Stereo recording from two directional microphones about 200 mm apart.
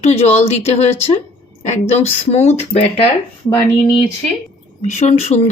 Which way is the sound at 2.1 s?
35° left (ahead or behind).